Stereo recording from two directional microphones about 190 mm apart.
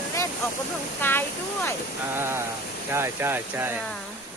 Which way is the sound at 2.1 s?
15° right (ahead or behind).